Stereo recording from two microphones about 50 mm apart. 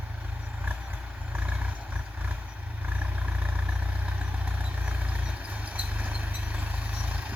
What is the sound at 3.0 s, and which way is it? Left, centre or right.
Vehicle, right.